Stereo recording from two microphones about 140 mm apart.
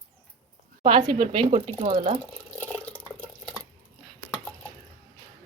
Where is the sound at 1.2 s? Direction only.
50° right (ahead or behind).